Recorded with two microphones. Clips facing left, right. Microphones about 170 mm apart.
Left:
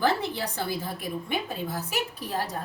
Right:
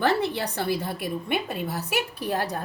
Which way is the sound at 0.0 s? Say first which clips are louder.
Right 2 dB; 65° right (ahead or behind).